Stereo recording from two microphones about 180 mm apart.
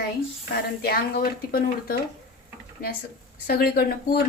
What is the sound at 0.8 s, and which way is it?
Speech, 60° left (ahead or behind).